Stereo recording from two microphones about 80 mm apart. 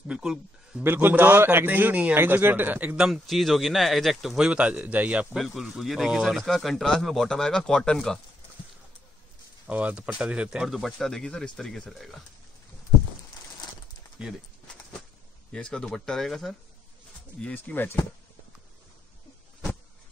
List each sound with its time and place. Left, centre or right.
0.1 s speech: centre
0.8 s a man's voice: right
3.0 s speech: centre
5.3 s speech: centre
9.7 s speech: centre
15.5 s speech: centre
17.4 s speech: centre
17.7 s speech: left